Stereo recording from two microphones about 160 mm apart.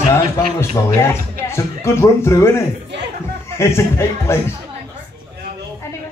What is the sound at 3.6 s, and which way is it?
Speech, 15° left (ahead or behind).